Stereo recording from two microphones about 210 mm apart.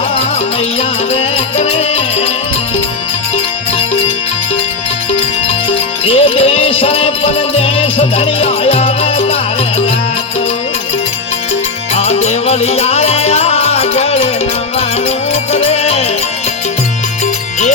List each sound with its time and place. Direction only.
0.8 s music: 30° left (ahead or behind)
6.1 s music: 30° left (ahead or behind)
11.9 s music: 30° left (ahead or behind)
15.5 s music: 30° left (ahead or behind)